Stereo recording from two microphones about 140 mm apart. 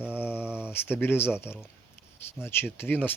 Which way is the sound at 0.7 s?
15° left (ahead or behind).